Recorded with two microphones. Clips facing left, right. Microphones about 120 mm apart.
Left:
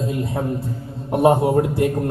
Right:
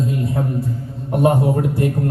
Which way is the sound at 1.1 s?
25° left (ahead or behind).